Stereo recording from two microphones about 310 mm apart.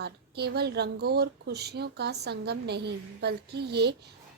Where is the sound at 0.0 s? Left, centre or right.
Right.